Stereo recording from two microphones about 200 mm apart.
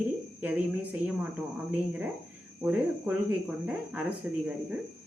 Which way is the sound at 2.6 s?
5° right (ahead or behind).